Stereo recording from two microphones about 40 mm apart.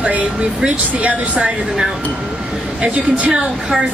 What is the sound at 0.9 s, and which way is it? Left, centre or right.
Speech, right.